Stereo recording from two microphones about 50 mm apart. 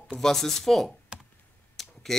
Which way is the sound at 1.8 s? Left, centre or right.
Centre.